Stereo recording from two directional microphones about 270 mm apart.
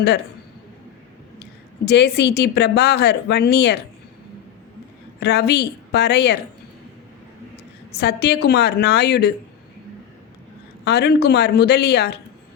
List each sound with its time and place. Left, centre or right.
1.8 s a woman's voice: left
5.2 s a woman's voice: left
8.0 s a woman's voice: left
10.8 s a woman's voice: left